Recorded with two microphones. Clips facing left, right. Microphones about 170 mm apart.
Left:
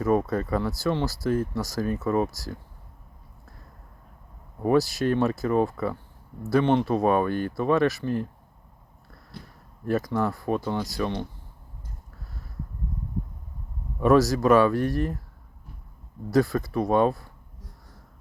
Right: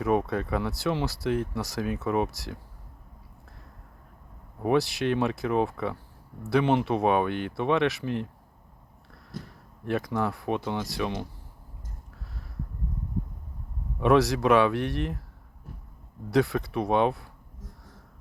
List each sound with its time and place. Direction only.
0.1 s speech: 5° right (ahead or behind)
4.6 s speech: centre (ahead or behind)
9.3 s speech: 45° right (ahead or behind)
9.8 s speech: centre (ahead or behind)
14.0 s speech: centre (ahead or behind)
16.3 s speech: centre (ahead or behind)